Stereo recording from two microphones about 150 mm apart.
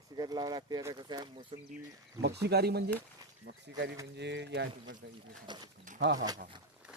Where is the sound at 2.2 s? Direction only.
90° right.